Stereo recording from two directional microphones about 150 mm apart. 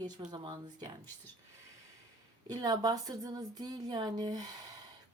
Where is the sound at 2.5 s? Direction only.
25° right (ahead or behind).